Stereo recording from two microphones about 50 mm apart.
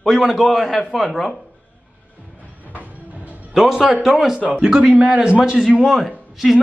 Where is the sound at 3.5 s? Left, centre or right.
Centre.